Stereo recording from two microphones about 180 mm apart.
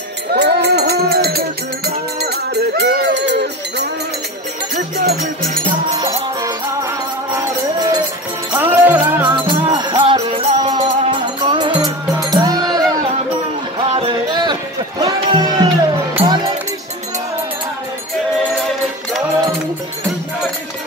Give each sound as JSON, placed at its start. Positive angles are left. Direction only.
{"t": 0.3, "sound": "music", "side_deg": -65}
{"t": 4.7, "sound": "music", "side_deg": -55}
{"t": 7.3, "sound": "music", "side_deg": -20}
{"t": 9.3, "sound": "music", "side_deg": -25}
{"t": 10.1, "sound": "music", "side_deg": -35}
{"t": 10.7, "sound": "music", "side_deg": -25}
{"t": 13.9, "sound": "music", "side_deg": -25}